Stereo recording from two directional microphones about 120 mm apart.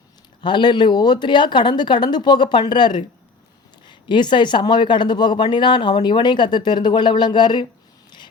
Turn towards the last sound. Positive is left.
turn(degrees=35)  # may be behind; listen again after turning